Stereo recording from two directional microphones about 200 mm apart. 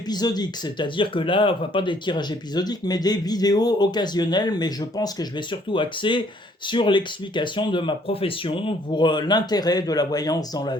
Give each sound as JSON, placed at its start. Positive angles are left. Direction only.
{"t": 0.1, "sound": "speech", "side_deg": 20}